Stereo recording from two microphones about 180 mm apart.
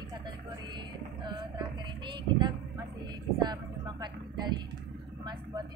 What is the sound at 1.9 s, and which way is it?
Speech, 25° right (ahead or behind).